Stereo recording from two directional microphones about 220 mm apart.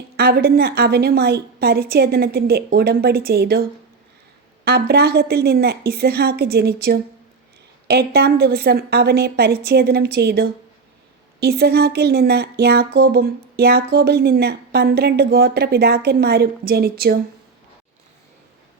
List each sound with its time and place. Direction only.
0.2 s speech: 45° right (ahead or behind)